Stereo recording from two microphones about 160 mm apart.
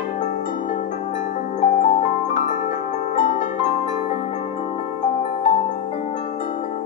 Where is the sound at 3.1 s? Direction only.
55° left (ahead or behind).